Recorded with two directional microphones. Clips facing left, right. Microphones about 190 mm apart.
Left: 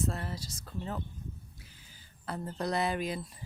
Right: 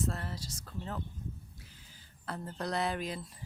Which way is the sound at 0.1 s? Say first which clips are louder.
Left 2 dB; 10° left (ahead or behind).